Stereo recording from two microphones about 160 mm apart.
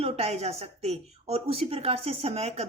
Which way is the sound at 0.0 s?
40° right (ahead or behind).